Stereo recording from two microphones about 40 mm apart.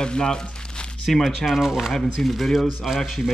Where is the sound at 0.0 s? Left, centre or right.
Left.